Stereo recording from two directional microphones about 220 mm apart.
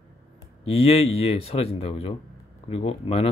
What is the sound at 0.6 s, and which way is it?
Speech, 25° left (ahead or behind).